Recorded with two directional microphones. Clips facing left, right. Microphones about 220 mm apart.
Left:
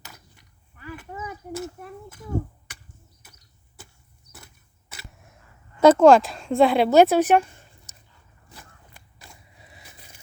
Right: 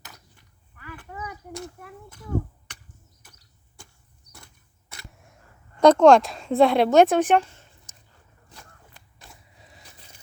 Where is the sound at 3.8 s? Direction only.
5° left (ahead or behind).